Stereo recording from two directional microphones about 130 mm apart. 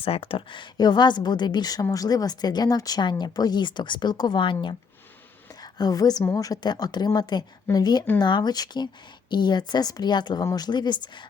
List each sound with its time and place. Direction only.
0.0 s a woman's voice: 45° left (ahead or behind)
5.5 s a sound: 30° left (ahead or behind)
6.2 s a woman's voice: 25° left (ahead or behind)